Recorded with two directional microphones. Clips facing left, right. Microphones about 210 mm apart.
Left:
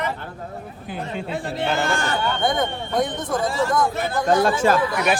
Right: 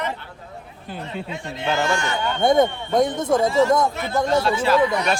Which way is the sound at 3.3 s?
25° right (ahead or behind).